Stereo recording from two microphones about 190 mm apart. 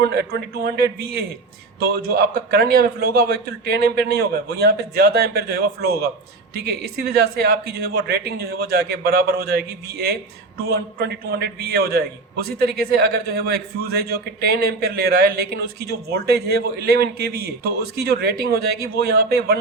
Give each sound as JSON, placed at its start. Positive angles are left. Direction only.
{"t": 0.0, "sound": "a man's voice", "side_deg": -55}